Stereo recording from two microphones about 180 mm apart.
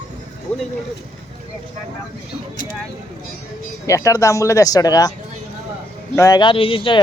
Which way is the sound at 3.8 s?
15° left (ahead or behind).